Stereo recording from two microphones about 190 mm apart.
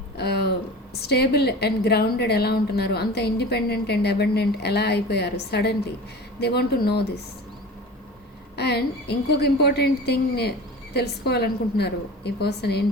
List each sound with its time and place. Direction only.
0.2 s a sound: 60° left (ahead or behind)
1.0 s a woman's voice: 60° left (ahead or behind)
8.5 s a woman's voice: 60° left (ahead or behind)